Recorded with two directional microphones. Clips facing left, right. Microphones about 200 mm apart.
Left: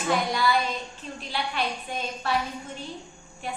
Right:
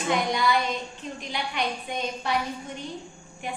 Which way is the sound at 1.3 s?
15° right (ahead or behind).